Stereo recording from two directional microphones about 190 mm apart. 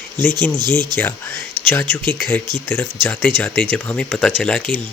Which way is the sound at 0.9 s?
10° left (ahead or behind).